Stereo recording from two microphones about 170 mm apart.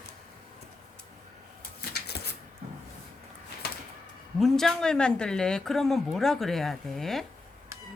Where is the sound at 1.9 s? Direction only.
70° left (ahead or behind).